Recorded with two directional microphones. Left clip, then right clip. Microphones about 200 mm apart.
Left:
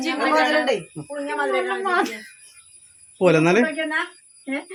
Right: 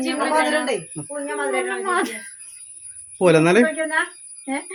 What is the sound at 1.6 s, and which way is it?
Speech, 15° left (ahead or behind).